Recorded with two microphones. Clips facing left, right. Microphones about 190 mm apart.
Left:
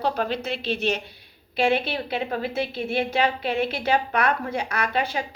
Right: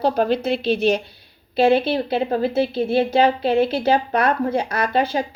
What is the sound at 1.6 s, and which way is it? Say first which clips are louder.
A woman's voice: right 6 dB; 30° right (ahead or behind).